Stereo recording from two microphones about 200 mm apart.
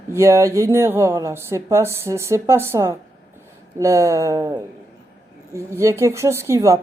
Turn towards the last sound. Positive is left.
turn(degrees=-15)  # may be behind; listen again after turning